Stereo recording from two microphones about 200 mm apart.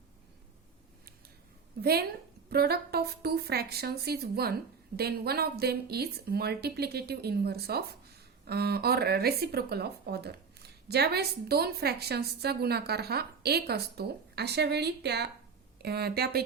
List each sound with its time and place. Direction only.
1.8 s speech: 50° right (ahead or behind)